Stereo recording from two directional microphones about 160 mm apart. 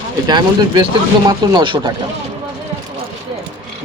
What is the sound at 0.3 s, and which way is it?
Speech, 25° right (ahead or behind).